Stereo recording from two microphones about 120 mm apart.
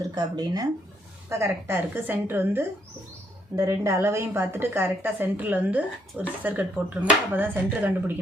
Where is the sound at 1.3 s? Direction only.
25° right (ahead or behind).